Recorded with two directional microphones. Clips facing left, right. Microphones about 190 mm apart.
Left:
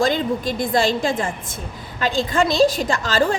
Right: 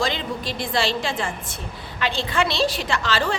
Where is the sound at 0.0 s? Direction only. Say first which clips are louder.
Left 6 dB; 50° left (ahead or behind).